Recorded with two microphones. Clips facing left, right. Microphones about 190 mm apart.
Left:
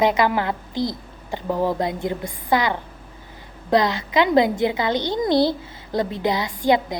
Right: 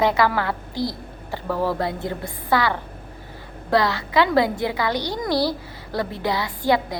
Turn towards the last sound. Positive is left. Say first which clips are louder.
# left 2 dB
turn(degrees=20)  # may be behind; listen again after turning